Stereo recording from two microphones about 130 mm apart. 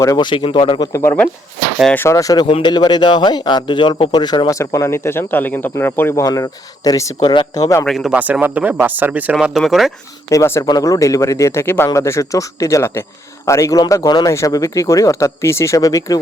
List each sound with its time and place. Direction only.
0.0 s speech: 30° left (ahead or behind)
0.9 s a man's voice: 20° left (ahead or behind)
2.5 s a man's voice: 40° left (ahead or behind)
7.2 s speech: 40° left (ahead or behind)
7.9 s speech: centre (ahead or behind)
8.2 s speech: 15° right (ahead or behind)
10.2 s a man's voice: 20° left (ahead or behind)